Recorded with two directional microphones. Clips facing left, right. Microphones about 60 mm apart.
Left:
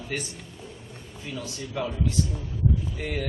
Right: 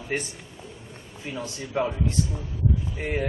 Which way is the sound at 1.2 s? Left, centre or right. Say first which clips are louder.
Right 2 dB; right.